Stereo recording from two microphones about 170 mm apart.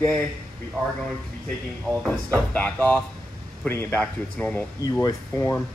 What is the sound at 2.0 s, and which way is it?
Speech, 10° left (ahead or behind).